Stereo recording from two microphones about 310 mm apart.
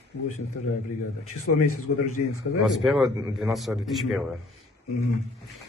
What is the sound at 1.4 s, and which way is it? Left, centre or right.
Speech, left.